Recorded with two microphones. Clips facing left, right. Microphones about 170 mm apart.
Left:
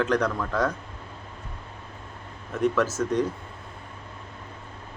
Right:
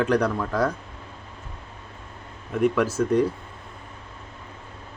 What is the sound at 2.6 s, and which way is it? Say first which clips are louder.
Speech: right 2 dB; 10° right (ahead or behind).